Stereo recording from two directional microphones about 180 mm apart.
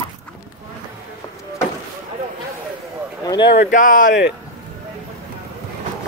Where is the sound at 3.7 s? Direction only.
50° left (ahead or behind).